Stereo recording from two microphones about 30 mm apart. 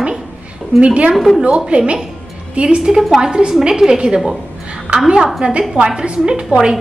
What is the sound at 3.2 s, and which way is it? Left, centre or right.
Speech, right.